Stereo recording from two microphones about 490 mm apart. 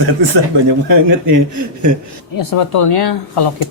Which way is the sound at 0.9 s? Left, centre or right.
Right.